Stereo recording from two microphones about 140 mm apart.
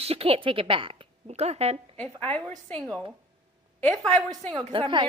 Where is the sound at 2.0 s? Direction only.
10° left (ahead or behind).